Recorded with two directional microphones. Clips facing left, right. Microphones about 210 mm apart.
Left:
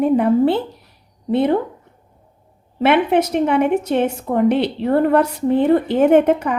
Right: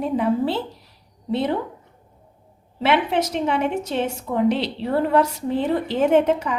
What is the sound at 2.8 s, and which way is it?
A woman's voice, 55° left (ahead or behind).